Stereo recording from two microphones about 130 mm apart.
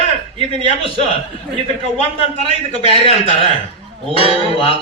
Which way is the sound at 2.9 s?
45° left (ahead or behind).